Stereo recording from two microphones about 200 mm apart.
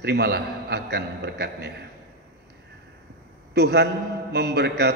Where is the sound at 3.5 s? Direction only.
55° right (ahead or behind).